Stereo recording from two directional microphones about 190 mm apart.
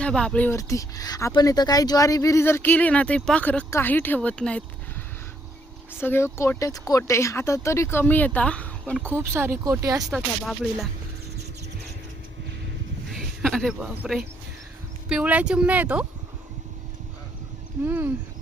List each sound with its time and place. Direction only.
0.0 s speech: 5° left (ahead or behind)
6.0 s speech: 10° left (ahead or behind)
9.0 s speech: 10° right (ahead or behind)
10.1 s music: centre (ahead or behind)
13.1 s speech: centre (ahead or behind)
17.8 s speech: 10° right (ahead or behind)